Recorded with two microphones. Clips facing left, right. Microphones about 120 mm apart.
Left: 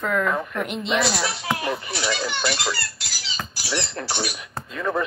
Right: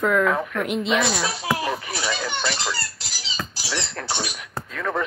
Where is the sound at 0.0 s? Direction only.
Centre (ahead or behind).